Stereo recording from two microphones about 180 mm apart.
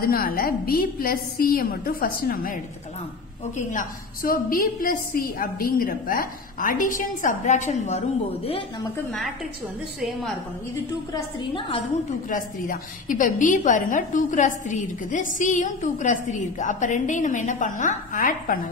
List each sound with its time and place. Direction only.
0.0 s a woman's voice: 55° left (ahead or behind)
9.9 s a woman's voice: centre (ahead or behind)
11.1 s a woman's voice: 25° left (ahead or behind)
12.3 s a woman's voice: 50° left (ahead or behind)